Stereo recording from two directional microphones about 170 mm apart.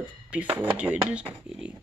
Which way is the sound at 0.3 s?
10° right (ahead or behind).